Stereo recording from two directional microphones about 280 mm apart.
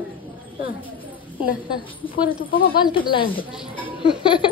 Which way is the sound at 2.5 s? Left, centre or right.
Left.